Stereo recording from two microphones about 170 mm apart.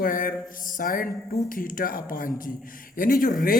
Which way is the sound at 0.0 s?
55° left (ahead or behind).